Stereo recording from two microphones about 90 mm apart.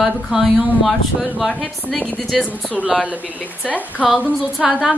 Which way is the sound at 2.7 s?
15° right (ahead or behind).